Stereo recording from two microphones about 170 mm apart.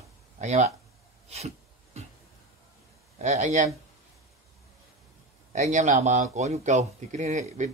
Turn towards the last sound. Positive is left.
turn(degrees=-45)  # may be behind; listen again after turning